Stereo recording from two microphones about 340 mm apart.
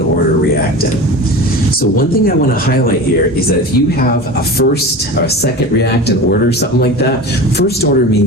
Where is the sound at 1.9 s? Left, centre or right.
Left.